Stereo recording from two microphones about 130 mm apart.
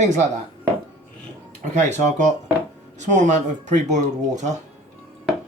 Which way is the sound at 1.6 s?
65° right (ahead or behind).